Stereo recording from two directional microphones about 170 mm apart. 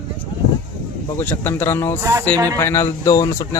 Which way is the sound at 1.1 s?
10° left (ahead or behind).